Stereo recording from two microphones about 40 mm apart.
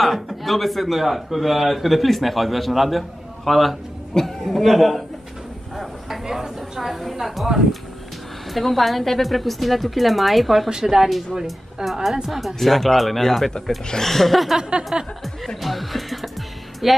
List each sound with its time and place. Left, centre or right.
0.0 s a man's voice: centre
5.8 s a sound: centre
6.9 s a man's voice: centre
8.5 s a man's voice: centre
14.6 s a sound: right
15.2 s speech: centre